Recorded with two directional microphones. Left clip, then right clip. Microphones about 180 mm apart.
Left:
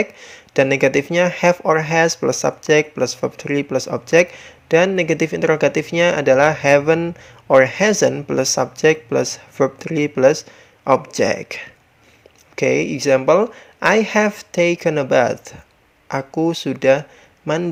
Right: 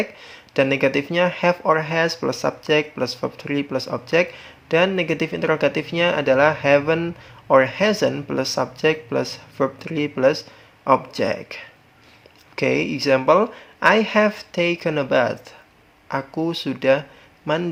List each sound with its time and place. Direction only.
0.0 s speech: 25° left (ahead or behind)